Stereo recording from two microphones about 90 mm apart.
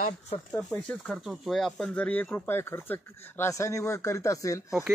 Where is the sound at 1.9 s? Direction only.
15° left (ahead or behind).